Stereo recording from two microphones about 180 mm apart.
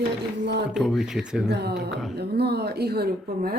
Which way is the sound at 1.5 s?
65° right (ahead or behind).